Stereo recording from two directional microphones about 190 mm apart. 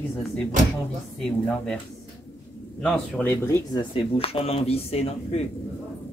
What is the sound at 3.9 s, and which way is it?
Speech, 30° left (ahead or behind).